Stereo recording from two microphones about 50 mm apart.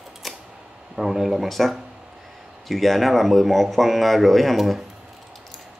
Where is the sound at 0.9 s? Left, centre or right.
Centre.